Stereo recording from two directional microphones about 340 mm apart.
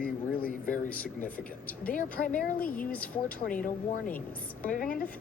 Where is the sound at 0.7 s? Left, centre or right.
Centre.